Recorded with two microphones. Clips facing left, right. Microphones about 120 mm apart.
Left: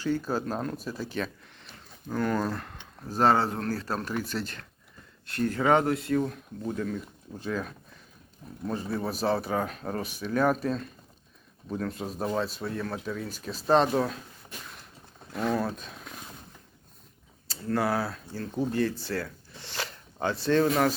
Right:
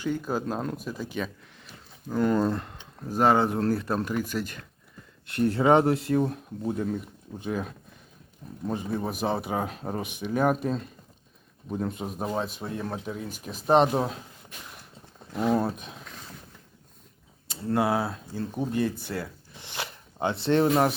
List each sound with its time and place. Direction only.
0.2 s speech: 15° right (ahead or behind)
0.9 s a sound: 15° right (ahead or behind)
2.2 s speech: 20° right (ahead or behind)
15.3 s speech: 15° right (ahead or behind)
17.5 s speech: 20° right (ahead or behind)
19.0 s zipper: 20° right (ahead or behind)
20.4 s speech: 20° right (ahead or behind)